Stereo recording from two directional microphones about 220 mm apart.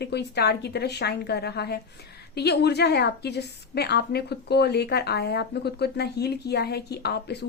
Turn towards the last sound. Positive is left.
turn(degrees=50)  # may be behind; listen again after turning